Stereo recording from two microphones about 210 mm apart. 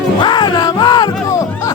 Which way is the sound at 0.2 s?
20° left (ahead or behind).